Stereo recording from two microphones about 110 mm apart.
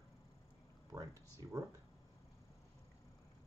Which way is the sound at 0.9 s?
30° right (ahead or behind).